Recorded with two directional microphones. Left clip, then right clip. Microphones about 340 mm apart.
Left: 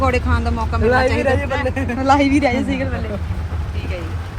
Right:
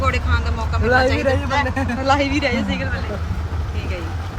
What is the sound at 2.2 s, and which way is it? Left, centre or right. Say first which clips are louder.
Speech: left 3 dB; centre.